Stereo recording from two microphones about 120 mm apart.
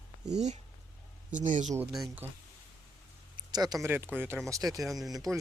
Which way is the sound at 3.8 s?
20° right (ahead or behind).